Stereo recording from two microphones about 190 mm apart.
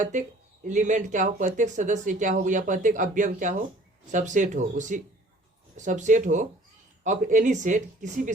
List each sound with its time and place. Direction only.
0.0 s speech: 40° right (ahead or behind)